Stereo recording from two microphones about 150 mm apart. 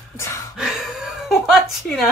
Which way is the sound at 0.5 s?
5° right (ahead or behind).